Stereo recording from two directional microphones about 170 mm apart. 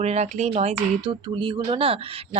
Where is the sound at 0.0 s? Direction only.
40° right (ahead or behind).